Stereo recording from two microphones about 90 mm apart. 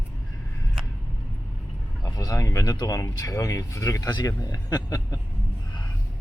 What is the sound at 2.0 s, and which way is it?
Speech, 40° left (ahead or behind).